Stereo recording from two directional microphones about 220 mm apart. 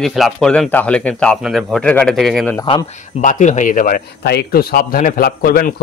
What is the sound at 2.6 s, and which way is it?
Speech, 30° left (ahead or behind).